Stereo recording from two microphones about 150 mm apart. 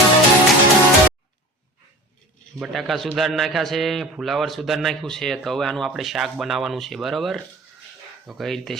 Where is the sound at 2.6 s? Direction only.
Centre (ahead or behind).